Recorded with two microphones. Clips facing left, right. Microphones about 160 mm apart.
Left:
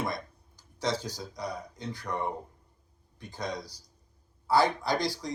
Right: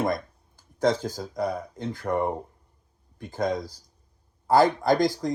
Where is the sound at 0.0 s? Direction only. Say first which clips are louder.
Right 7 dB; 50° right (ahead or behind).